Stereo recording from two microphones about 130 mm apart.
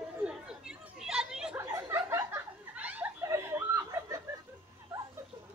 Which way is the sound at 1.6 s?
25° right (ahead or behind).